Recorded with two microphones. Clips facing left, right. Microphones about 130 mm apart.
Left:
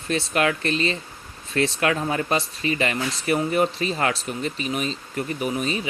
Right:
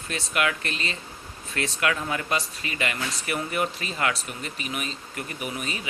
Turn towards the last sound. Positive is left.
turn(degrees=30)  # may be behind; listen again after turning